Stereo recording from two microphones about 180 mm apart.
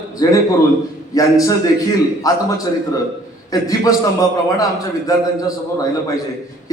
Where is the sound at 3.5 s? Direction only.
20° left (ahead or behind).